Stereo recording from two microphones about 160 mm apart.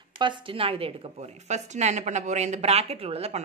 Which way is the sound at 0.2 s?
30° right (ahead or behind).